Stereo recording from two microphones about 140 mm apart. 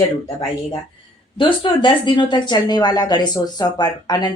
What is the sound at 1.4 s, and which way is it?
A woman's voice, 35° left (ahead or behind).